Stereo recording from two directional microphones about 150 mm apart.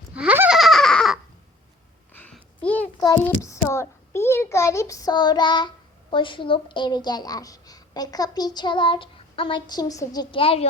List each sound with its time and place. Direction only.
0.1 s goat: 10° right (ahead or behind)
2.1 s a sound: 10° left (ahead or behind)
3.2 s a child's voice: 20° left (ahead or behind)
10.4 s a child's voice: 40° left (ahead or behind)